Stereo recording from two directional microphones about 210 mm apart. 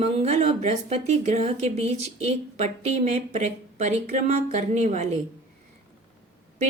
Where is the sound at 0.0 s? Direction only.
30° right (ahead or behind).